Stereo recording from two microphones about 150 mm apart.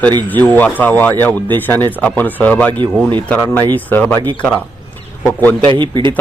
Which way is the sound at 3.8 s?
10° left (ahead or behind).